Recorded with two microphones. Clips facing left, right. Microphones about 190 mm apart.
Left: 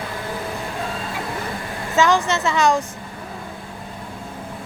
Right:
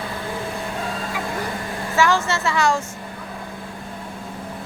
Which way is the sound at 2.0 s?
20° left (ahead or behind).